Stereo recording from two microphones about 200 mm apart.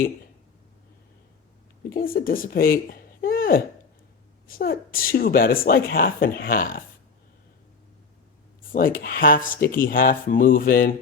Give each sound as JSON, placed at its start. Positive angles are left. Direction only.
{"t": 1.9, "sound": "speech", "side_deg": 45}
{"t": 8.7, "sound": "speech", "side_deg": 45}